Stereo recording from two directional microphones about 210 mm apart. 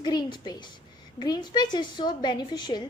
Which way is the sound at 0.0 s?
20° left (ahead or behind).